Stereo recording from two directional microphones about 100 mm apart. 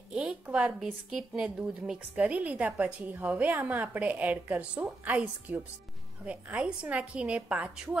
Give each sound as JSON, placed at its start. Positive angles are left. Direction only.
{"t": 0.1, "sound": "a woman's voice", "side_deg": -10}